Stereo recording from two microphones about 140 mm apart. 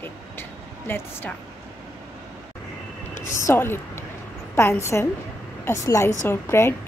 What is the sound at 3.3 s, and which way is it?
A woman's voice, 20° left (ahead or behind).